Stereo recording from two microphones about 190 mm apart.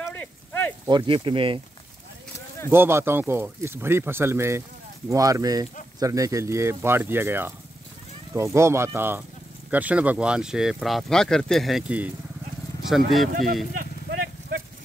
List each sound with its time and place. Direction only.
0.0 s a sound: 10° left (ahead or behind)
0.8 s speech: 25° right (ahead or behind)
2.7 s speech: 10° right (ahead or behind)